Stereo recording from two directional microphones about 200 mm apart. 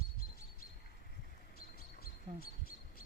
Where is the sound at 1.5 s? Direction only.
50° left (ahead or behind).